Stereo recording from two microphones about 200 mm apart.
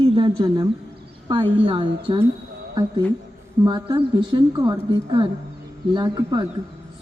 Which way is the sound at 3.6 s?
20° right (ahead or behind).